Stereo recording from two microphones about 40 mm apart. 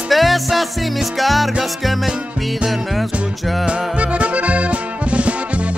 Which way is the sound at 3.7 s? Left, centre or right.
Right.